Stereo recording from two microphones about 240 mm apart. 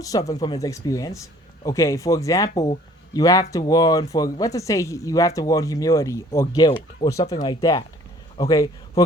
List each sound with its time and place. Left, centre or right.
0.3 s a man's voice: centre